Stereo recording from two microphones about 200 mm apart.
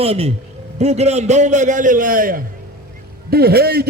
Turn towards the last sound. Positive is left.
turn(degrees=-50)  # may be behind; listen again after turning